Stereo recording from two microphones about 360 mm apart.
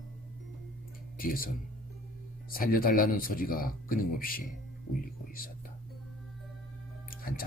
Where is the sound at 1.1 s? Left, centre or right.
Left.